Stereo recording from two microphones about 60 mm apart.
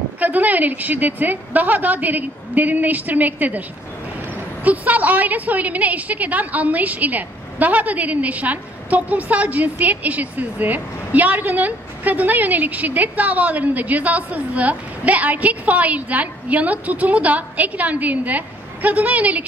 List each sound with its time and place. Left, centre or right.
0.2 s a woman's voice: right
4.6 s a woman's voice: right